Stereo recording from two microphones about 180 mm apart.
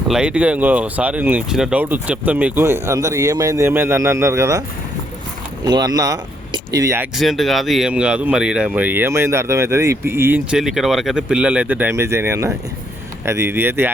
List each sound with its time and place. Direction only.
0.1 s speech: 5° right (ahead or behind)
5.6 s speech: 20° right (ahead or behind)
7.2 s speech: centre (ahead or behind)